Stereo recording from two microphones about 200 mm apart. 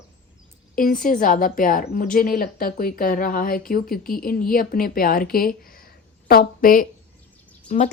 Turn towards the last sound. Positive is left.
turn(degrees=35)  # may be behind; listen again after turning